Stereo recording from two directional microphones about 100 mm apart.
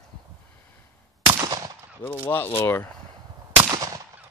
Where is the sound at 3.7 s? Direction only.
35° right (ahead or behind).